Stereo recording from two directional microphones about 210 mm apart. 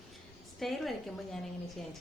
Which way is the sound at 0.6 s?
Centre (ahead or behind).